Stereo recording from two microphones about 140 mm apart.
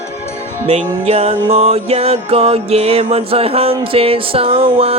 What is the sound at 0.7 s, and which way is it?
Music, 50° right (ahead or behind).